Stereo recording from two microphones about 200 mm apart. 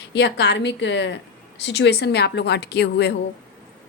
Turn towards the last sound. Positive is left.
turn(degrees=55)  # may be behind; listen again after turning